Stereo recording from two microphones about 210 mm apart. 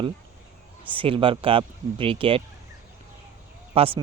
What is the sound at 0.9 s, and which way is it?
Speech, 25° right (ahead or behind).